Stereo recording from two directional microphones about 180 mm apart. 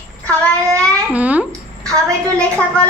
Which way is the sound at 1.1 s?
10° right (ahead or behind).